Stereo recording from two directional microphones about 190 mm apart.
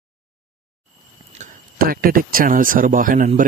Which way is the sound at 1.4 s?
50° right (ahead or behind).